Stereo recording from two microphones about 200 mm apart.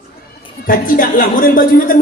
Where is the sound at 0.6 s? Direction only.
45° left (ahead or behind).